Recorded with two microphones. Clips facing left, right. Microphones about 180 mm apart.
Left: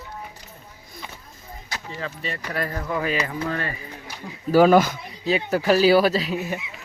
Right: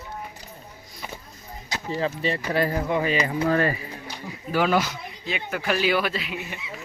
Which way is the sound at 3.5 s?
40° right (ahead or behind).